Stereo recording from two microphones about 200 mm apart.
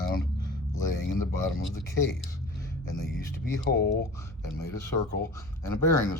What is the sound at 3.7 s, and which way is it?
Speech, 55° left (ahead or behind).